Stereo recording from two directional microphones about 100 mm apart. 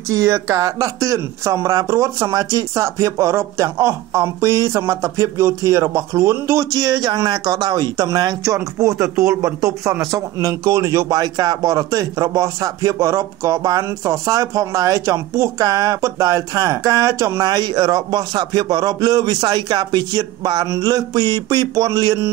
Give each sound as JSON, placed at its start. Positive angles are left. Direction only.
{"t": 0.1, "sound": "speech", "side_deg": -35}